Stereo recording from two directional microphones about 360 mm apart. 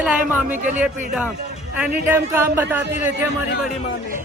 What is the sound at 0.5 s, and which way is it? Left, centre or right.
Speech, right.